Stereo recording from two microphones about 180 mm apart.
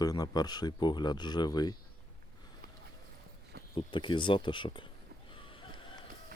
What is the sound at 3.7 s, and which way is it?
Speech, 25° left (ahead or behind).